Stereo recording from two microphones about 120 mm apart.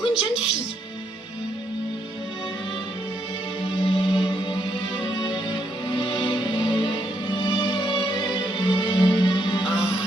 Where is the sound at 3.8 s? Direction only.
40° left (ahead or behind).